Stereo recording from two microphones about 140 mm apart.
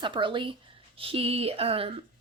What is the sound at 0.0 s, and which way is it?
Speech, 35° right (ahead or behind).